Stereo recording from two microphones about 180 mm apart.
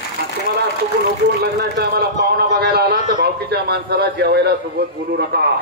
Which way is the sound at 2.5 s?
60° right (ahead or behind).